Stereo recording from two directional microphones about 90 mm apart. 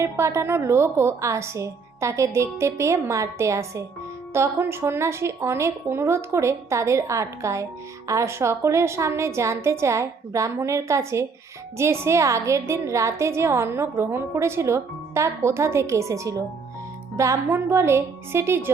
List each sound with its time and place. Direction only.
0.0 s a woman's voice: 30° right (ahead or behind)